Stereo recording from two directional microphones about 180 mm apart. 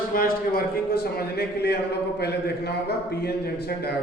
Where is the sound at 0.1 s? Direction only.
55° left (ahead or behind).